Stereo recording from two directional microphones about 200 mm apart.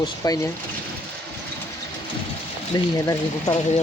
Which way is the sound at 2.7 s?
15° left (ahead or behind).